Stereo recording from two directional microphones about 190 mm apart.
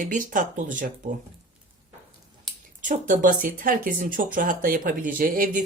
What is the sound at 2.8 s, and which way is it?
Speech, 40° right (ahead or behind).